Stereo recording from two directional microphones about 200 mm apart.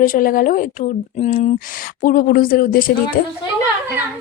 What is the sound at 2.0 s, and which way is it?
Speech, 45° left (ahead or behind).